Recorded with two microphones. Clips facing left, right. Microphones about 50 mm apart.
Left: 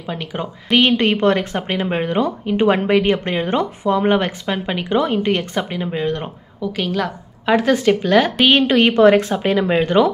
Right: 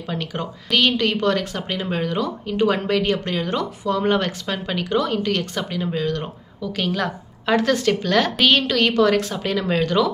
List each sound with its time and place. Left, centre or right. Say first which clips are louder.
0.1 s speech: left 2 dB; centre
6.8 s a woman's voice: left 2 dB; centre
7.4 s speech: left 4 dB; centre